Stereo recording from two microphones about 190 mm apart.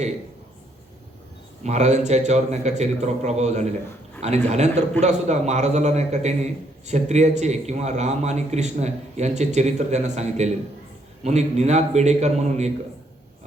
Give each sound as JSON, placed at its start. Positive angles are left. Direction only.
{"t": 1.6, "sound": "a man's voice", "side_deg": -35}